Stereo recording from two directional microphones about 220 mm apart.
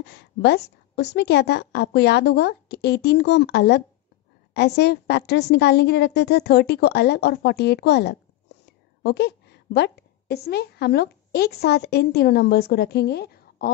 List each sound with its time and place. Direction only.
0.0 s a woman's voice: 50° left (ahead or behind)